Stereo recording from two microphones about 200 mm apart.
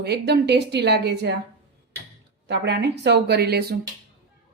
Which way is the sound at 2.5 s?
55° right (ahead or behind).